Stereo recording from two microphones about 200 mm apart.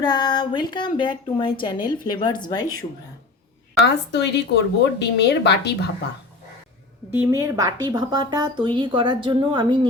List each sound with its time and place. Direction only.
0.0 s speech: 20° left (ahead or behind)
3.8 s speech: 60° left (ahead or behind)
7.1 s speech: 10° right (ahead or behind)